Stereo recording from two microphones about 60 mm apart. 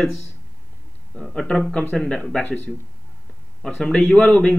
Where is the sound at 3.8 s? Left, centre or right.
Centre.